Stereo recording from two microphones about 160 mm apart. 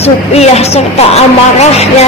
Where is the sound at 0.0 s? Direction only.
40° left (ahead or behind).